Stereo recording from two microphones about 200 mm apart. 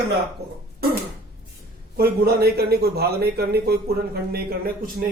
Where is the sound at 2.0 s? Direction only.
50° right (ahead or behind).